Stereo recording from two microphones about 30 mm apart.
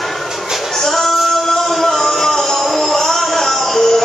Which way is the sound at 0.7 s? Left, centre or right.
Centre.